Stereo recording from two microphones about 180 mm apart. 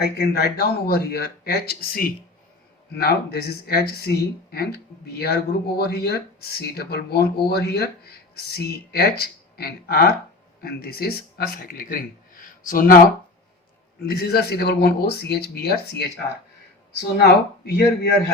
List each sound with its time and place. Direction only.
0.0 s speech: 60° left (ahead or behind)
14.0 s speech: 60° left (ahead or behind)